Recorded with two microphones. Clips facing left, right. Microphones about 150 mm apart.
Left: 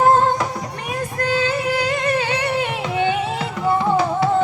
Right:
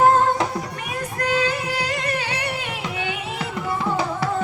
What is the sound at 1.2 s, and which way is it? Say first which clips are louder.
Music: left 2 dB; 30° left (ahead or behind).